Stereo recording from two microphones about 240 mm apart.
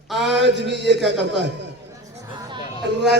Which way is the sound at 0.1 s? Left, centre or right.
Centre.